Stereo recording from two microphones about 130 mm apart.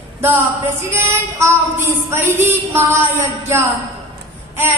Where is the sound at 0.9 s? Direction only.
20° right (ahead or behind).